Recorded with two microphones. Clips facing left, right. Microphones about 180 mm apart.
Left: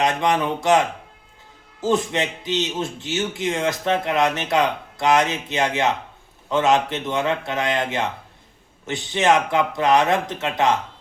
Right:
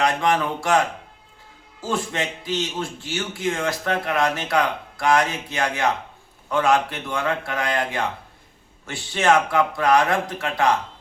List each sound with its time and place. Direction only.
0.0 s a man's voice: 20° left (ahead or behind)